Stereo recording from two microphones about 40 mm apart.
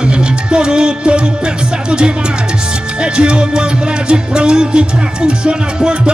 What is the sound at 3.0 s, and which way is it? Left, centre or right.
Music, right.